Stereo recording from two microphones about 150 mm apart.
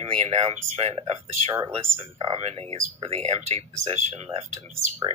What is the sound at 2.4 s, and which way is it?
Speech, 45° right (ahead or behind).